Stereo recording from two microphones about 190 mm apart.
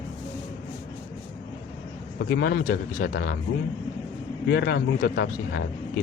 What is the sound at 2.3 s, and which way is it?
A man's voice, 55° left (ahead or behind).